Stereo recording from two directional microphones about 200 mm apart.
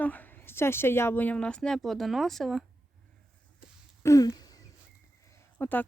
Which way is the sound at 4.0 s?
15° left (ahead or behind).